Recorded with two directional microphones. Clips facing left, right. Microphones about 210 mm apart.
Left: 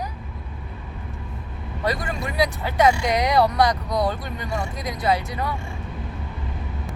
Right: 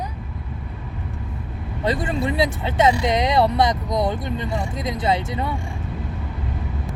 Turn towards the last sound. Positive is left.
turn(degrees=-25)  # may be behind; listen again after turning